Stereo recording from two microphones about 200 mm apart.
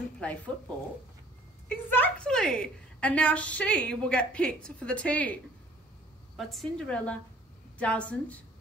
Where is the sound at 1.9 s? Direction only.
10° left (ahead or behind).